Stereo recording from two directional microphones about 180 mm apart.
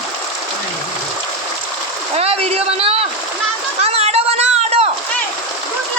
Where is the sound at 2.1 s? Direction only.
35° right (ahead or behind).